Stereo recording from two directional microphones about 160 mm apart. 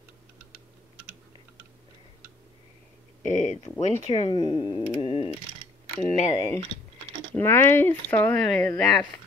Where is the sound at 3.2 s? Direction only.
50° left (ahead or behind).